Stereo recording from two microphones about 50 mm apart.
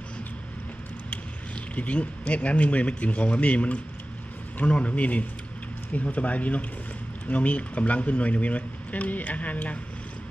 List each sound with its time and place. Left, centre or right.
1.1 s speech: left